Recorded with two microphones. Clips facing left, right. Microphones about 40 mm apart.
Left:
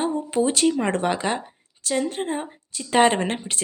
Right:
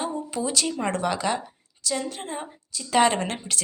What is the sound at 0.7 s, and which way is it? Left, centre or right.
A woman's voice, left.